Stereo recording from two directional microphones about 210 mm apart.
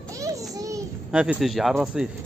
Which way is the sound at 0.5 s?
15° right (ahead or behind).